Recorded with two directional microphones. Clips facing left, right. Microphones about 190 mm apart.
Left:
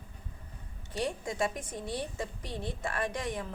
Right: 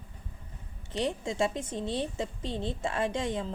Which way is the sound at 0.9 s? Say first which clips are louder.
Right 3 dB; 25° right (ahead or behind).